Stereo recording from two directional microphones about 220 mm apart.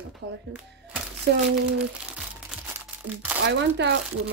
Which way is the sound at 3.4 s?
50° right (ahead or behind).